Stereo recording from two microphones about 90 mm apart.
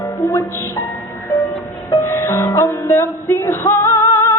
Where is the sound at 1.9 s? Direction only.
35° left (ahead or behind).